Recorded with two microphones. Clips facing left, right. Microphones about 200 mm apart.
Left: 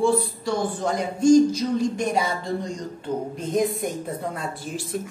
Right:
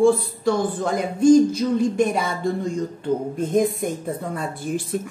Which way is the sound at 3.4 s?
50° right (ahead or behind).